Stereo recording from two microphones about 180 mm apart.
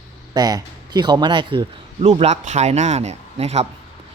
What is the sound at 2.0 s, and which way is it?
Speech, 40° right (ahead or behind).